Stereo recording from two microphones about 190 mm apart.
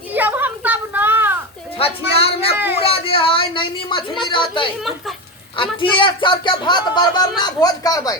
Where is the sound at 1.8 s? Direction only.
30° left (ahead or behind).